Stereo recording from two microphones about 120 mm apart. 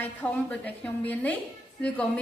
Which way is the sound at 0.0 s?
15° left (ahead or behind).